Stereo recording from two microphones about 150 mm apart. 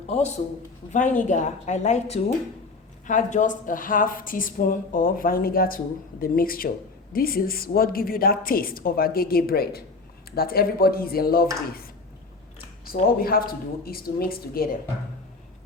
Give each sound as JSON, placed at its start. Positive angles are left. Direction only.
{"t": 0.1, "sound": "a woman's voice", "side_deg": 45}
{"t": 0.9, "sound": "a woman's voice", "side_deg": 60}
{"t": 12.9, "sound": "a woman's voice", "side_deg": 80}